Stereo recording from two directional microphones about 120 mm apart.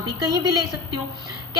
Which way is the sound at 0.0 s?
35° right (ahead or behind).